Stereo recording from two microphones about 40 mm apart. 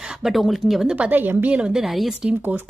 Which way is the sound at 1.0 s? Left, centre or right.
Right.